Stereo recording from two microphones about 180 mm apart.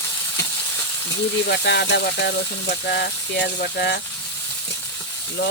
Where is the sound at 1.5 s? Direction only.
65° left (ahead or behind).